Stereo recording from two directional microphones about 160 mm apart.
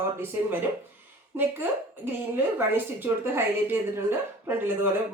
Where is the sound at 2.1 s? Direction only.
15° right (ahead or behind).